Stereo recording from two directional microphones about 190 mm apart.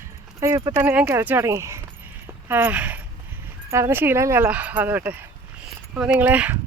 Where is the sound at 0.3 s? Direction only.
15° right (ahead or behind).